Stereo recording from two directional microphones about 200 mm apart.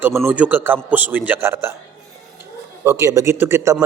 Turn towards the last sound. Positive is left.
turn(degrees=-10)  # may be behind; listen again after turning